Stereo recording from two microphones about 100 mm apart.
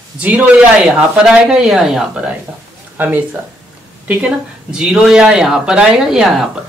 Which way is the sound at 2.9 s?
20° right (ahead or behind).